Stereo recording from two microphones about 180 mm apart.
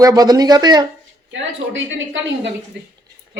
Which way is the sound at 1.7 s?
90° right.